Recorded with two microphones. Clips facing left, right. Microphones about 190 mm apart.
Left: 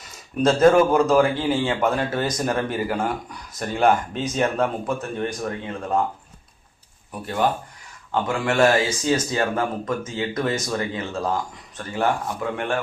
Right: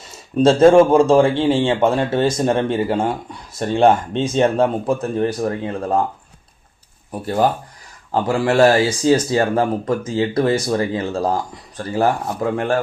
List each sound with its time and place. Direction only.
0.1 s speech: 30° right (ahead or behind)
7.1 s speech: 35° right (ahead or behind)